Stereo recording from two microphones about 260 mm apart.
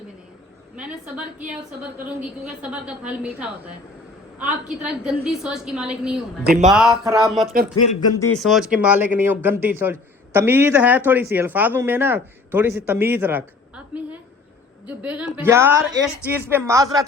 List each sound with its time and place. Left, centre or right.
0.8 s a woman's voice: centre
2.4 s a woman's voice: centre
6.4 s speech: right
6.7 s a woman's voice: centre